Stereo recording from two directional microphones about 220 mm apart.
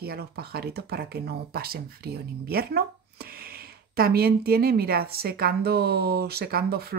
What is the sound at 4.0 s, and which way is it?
A woman's voice, 45° right (ahead or behind).